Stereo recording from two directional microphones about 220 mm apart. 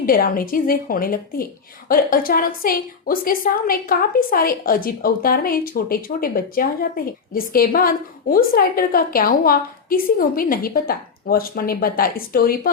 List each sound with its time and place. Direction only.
0.0 s a woman's voice: 40° left (ahead or behind)